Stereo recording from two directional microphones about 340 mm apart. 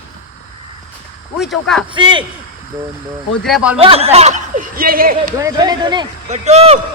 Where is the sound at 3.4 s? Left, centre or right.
Centre.